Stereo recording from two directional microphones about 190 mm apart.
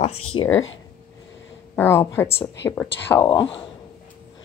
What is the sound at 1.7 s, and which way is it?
A woman's voice, 10° left (ahead or behind).